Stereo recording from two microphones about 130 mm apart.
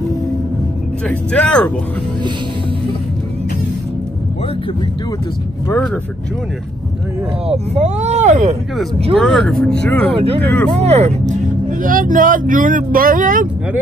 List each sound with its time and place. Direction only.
1.0 s speech: 10° left (ahead or behind)
7.4 s speech: 55° right (ahead or behind)
9.1 s speech: 5° left (ahead or behind)
10.1 s speech: 50° right (ahead or behind); by 13.5 s 90° right